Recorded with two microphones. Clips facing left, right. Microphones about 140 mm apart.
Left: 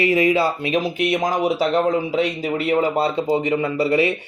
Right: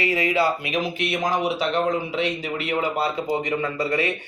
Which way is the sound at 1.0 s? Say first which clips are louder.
Left 3 dB; 45° left (ahead or behind).